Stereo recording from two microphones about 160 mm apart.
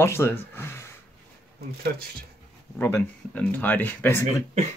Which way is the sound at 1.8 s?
70° right (ahead or behind).